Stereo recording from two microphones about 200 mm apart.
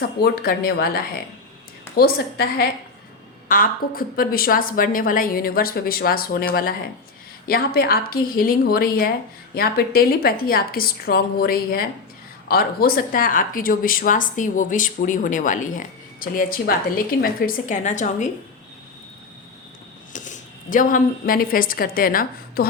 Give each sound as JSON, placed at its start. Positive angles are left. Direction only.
{"t": 0.2, "sound": "speech", "side_deg": 50}
{"t": 20.1, "sound": "a woman's voice", "side_deg": 40}